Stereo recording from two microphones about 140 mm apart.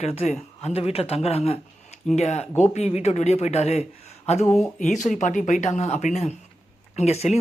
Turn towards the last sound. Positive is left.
turn(degrees=50)  # may be behind; listen again after turning